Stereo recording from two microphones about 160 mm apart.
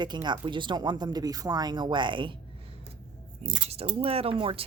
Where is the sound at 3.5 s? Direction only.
35° right (ahead or behind).